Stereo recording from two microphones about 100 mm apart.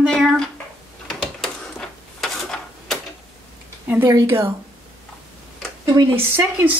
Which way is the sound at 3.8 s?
20° right (ahead or behind).